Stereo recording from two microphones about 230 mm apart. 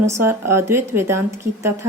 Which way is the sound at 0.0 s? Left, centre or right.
Centre.